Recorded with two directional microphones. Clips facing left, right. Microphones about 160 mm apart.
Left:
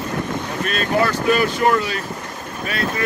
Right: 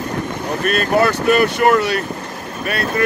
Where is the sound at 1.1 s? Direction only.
65° right (ahead or behind).